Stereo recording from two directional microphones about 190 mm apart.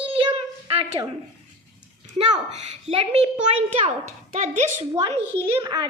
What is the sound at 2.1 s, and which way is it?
A child's voice, 25° right (ahead or behind).